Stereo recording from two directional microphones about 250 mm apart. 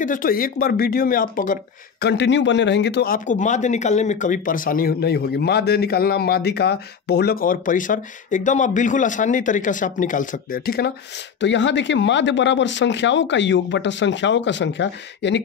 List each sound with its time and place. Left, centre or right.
0.0 s speech: left